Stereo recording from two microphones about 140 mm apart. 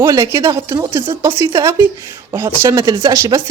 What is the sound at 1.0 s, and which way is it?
Speech, 35° right (ahead or behind).